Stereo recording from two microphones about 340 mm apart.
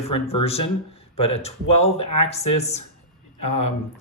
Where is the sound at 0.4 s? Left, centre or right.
Centre.